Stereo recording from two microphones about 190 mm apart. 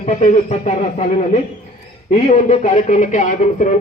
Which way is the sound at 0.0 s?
35° left (ahead or behind).